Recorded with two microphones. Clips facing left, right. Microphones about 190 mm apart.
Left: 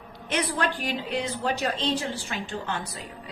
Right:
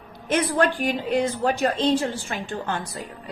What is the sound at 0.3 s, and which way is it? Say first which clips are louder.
A woman's voice: right 6 dB; 45° right (ahead or behind).